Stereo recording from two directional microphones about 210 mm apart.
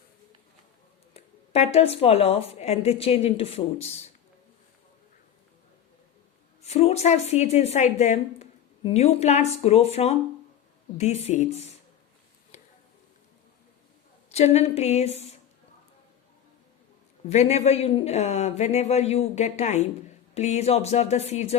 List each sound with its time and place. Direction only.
1.1 s a woman's voice: 30° left (ahead or behind)
6.6 s a woman's voice: 30° left (ahead or behind)
12.5 s a sound: 30° left (ahead or behind)
14.3 s a woman's voice: 30° left (ahead or behind)
17.2 s a woman's voice: 30° left (ahead or behind)